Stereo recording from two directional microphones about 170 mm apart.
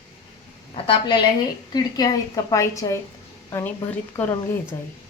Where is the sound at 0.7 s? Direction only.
30° left (ahead or behind).